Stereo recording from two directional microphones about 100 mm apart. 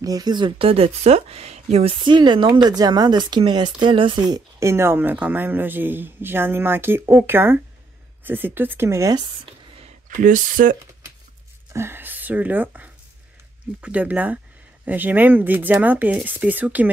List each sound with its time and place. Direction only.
0.0 s speech: 40° right (ahead or behind)
0.6 s speech: 75° right (ahead or behind); by 2.0 s 90° right
2.0 s speech: 50° right (ahead or behind)
4.6 s speech: 25° right (ahead or behind)
11.7 s speech: 25° right (ahead or behind)